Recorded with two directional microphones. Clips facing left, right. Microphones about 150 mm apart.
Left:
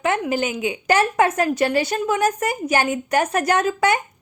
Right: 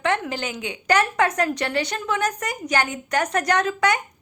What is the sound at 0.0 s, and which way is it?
A woman's voice, 15° left (ahead or behind).